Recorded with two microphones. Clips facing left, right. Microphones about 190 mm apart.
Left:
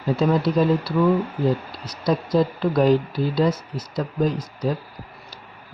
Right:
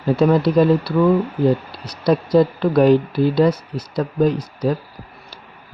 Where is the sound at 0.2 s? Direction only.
65° right (ahead or behind).